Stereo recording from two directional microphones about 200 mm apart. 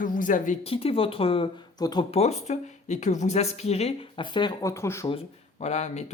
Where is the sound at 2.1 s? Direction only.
30° left (ahead or behind); by 5.1 s 15° left (ahead or behind).